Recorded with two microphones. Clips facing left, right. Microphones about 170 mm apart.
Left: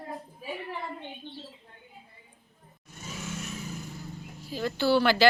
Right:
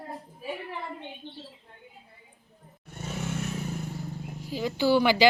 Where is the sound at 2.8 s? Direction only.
60° right (ahead or behind).